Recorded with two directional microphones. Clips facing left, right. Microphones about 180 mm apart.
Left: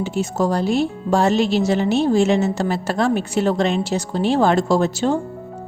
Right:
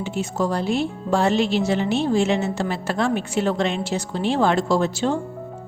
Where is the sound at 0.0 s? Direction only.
40° left (ahead or behind).